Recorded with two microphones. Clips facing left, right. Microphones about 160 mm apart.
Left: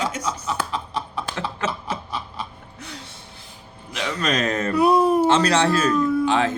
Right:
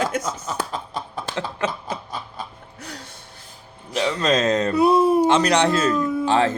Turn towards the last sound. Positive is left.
turn(degrees=-35)  # may be behind; listen again after turning